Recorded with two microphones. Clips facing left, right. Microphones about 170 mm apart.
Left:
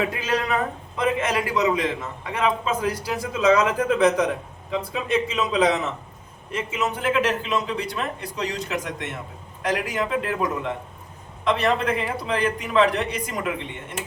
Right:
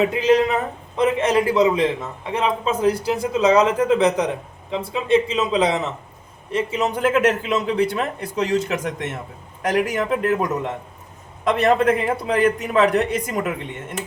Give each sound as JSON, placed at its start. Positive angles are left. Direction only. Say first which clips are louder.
{"t": 0.0, "sound": "a man's voice", "louder": "right 8 dB", "side_deg": -20}
{"t": 11.4, "sound": "a man's voice", "louder": "right 5 dB", "side_deg": -45}